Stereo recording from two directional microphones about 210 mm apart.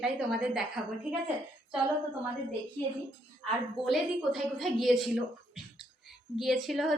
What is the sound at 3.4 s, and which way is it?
Speech, centre (ahead or behind).